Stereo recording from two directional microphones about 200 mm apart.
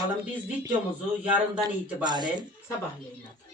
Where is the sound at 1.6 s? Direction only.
20° right (ahead or behind).